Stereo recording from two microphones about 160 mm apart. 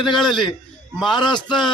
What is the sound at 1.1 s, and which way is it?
Speech, 25° left (ahead or behind).